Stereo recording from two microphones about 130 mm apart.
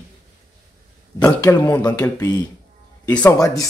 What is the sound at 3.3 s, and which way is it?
Speech, 25° left (ahead or behind).